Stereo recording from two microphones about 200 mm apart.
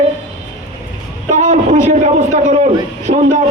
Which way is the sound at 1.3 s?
35° right (ahead or behind).